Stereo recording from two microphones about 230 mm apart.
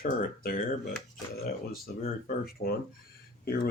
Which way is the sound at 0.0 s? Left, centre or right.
Left.